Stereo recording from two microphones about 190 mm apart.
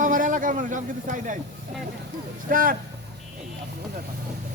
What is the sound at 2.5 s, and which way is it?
Speech, 45° right (ahead or behind).